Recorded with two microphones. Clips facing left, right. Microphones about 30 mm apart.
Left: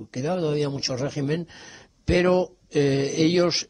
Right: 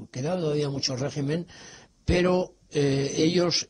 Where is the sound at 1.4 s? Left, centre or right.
Centre.